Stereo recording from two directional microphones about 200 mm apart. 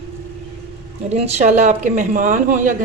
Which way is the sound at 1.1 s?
35° right (ahead or behind).